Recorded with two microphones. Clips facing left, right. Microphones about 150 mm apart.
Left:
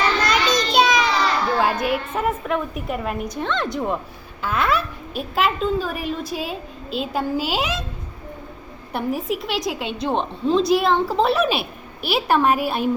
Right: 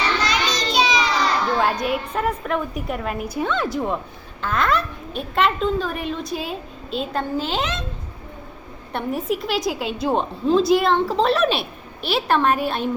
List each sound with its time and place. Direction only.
0.3 s child singing: 55° left (ahead or behind)
1.5 s a child's voice: 5° left (ahead or behind)
8.9 s a child's voice: centre (ahead or behind)